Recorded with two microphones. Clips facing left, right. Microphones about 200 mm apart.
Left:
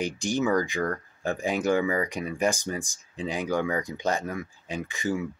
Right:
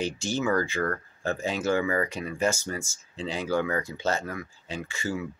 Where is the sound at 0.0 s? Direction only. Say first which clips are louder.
Left 2 dB; 15° left (ahead or behind).